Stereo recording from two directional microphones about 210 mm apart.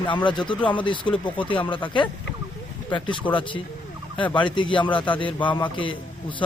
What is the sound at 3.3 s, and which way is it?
A man's voice, 25° left (ahead or behind).